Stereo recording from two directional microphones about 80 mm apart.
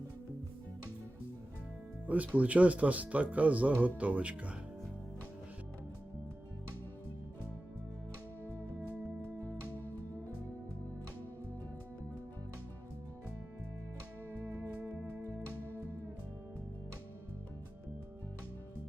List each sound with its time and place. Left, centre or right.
2.0 s speech: centre
9.7 s music: left
14.4 s music: right
14.8 s music: right